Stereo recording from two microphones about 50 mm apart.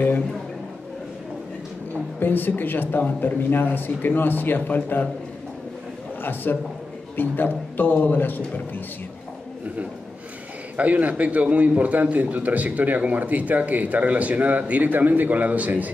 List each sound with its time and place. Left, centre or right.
2.1 s a man's voice: left
6.2 s a man's voice: left
10.8 s a man's voice: right